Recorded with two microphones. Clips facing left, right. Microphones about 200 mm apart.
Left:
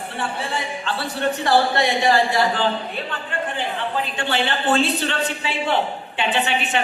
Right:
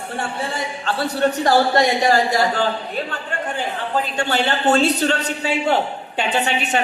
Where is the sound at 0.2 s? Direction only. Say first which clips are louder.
Right 1 dB; 45° right (ahead or behind).